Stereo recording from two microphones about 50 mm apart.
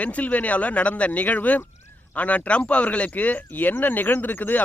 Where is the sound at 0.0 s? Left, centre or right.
Left.